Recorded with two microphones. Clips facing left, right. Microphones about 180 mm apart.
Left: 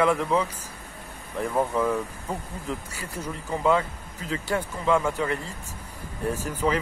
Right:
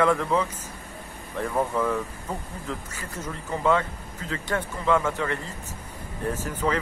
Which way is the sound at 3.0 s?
10° left (ahead or behind).